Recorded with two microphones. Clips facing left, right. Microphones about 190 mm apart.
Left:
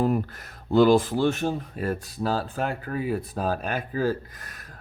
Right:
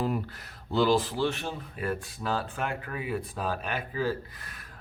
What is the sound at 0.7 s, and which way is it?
Speech, 50° left (ahead or behind).